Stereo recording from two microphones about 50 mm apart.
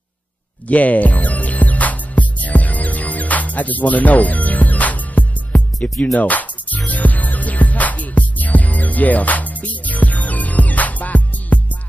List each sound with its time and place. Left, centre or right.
0.7 s music: left